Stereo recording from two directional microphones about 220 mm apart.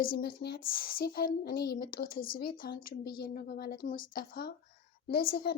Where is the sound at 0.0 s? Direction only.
45° left (ahead or behind).